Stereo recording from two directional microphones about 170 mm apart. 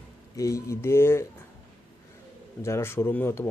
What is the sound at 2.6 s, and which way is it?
Speech, 15° left (ahead or behind).